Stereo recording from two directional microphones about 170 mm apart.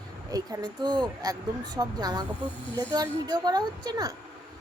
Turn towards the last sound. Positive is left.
turn(degrees=-25)  # may be behind; listen again after turning